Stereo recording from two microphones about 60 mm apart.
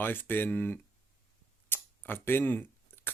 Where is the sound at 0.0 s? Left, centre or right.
Left.